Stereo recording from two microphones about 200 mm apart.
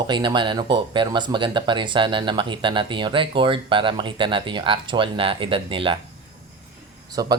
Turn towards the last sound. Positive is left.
turn(degrees=-20)  # may be behind; listen again after turning